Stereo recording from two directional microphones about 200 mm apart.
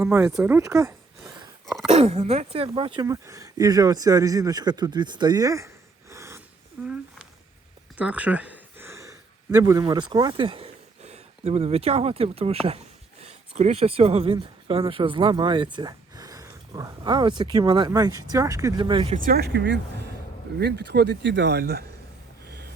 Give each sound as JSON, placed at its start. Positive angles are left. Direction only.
{"t": 0.1, "sound": "speech", "side_deg": -5}
{"t": 1.6, "sound": "a sound", "side_deg": 0}
{"t": 1.9, "sound": "speech", "side_deg": -30}
{"t": 6.8, "sound": "a sound", "side_deg": -5}
{"t": 7.9, "sound": "speech", "side_deg": -5}
{"t": 19.1, "sound": "speech", "side_deg": -45}
{"t": 22.4, "sound": "vehicle", "side_deg": -55}